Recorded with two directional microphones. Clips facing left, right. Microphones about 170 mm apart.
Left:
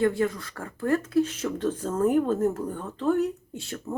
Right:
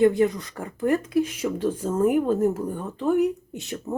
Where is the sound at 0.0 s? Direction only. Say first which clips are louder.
Right 5 dB; 20° right (ahead or behind).